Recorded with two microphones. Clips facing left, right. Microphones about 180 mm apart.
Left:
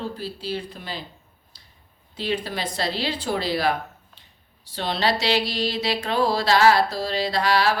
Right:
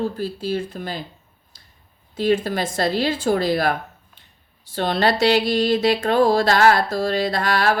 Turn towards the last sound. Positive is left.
turn(degrees=-50)  # may be behind; listen again after turning